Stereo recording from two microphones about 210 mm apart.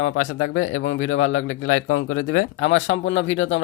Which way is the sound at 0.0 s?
75° left (ahead or behind).